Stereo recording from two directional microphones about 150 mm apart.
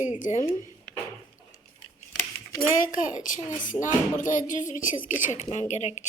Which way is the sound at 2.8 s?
65° left (ahead or behind).